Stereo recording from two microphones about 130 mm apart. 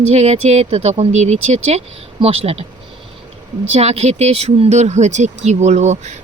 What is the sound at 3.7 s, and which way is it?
Speech, 50° right (ahead or behind).